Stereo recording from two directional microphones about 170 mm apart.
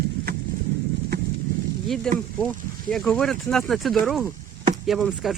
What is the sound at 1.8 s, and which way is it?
Speech, centre (ahead or behind).